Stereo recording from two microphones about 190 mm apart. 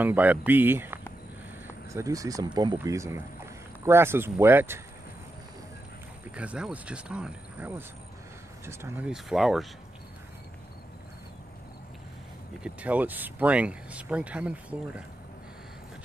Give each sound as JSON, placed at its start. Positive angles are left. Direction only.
{"t": 0.0, "sound": "speech", "side_deg": -10}
{"t": 6.3, "sound": "speech", "side_deg": -5}
{"t": 12.6, "sound": "speech", "side_deg": -5}